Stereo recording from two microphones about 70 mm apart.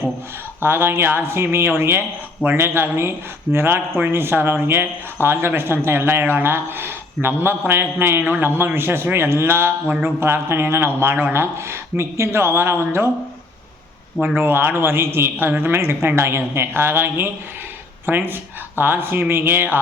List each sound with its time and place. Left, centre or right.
0.6 s speech: right
14.3 s speech: right